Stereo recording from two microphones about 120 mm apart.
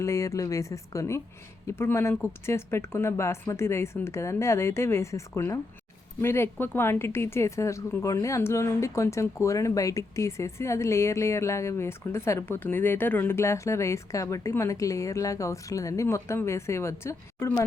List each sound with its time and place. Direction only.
0.0 s a woman's voice: 25° left (ahead or behind)